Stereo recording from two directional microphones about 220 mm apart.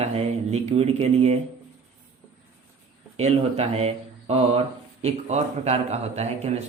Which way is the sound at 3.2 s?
30° right (ahead or behind).